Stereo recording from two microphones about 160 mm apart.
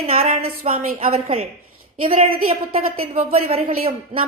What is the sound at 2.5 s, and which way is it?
A woman's voice, 35° right (ahead or behind).